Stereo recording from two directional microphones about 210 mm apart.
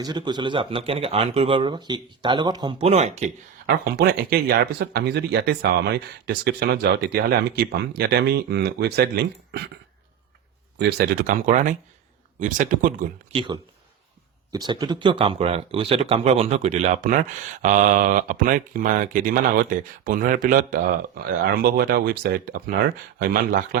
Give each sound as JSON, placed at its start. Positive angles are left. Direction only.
{"t": 0.0, "sound": "speech", "side_deg": -20}
{"t": 3.8, "sound": "speech", "side_deg": -50}
{"t": 10.8, "sound": "speech", "side_deg": -50}
{"t": 13.3, "sound": "speech", "side_deg": -20}